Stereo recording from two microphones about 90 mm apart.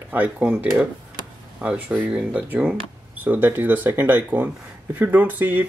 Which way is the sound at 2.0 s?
15° right (ahead or behind).